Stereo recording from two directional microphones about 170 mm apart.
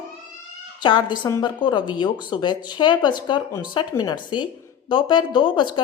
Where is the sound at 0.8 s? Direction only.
25° left (ahead or behind).